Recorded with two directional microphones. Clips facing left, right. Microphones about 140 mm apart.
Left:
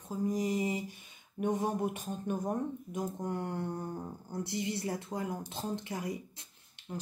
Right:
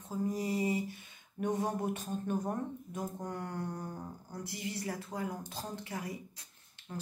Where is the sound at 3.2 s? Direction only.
25° left (ahead or behind).